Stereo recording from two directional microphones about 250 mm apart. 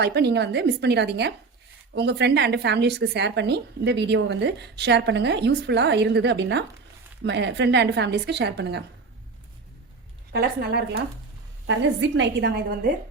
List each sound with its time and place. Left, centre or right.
0.0 s a woman's voice: right
10.3 s a woman's voice: right